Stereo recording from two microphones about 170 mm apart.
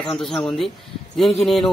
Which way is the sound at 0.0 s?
5° left (ahead or behind).